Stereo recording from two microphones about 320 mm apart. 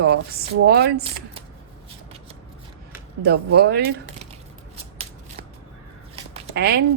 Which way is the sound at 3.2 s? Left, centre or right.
Right.